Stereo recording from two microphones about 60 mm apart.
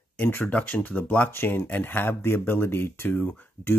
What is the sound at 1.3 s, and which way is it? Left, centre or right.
Speech, left.